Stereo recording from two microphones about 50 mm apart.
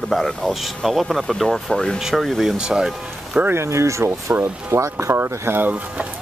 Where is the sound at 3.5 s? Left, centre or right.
Right.